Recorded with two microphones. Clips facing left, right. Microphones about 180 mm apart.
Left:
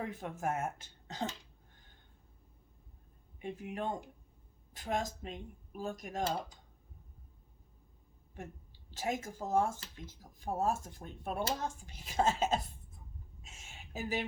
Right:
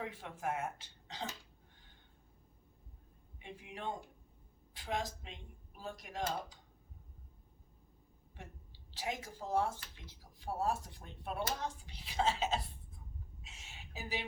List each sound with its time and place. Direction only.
0.0 s speech: 45° left (ahead or behind)
3.4 s speech: 45° left (ahead or behind)
8.9 s speech: 45° left (ahead or behind)
13.4 s a sound: 45° left (ahead or behind)